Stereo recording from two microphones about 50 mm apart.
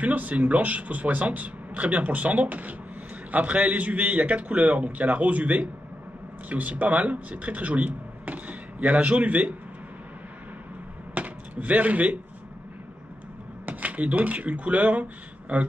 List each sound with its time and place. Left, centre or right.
0.0 s a man's voice: right
11.1 s speech: right
13.7 s speech: right